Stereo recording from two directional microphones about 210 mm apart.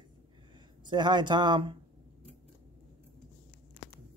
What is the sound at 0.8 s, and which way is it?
Speech, 20° right (ahead or behind).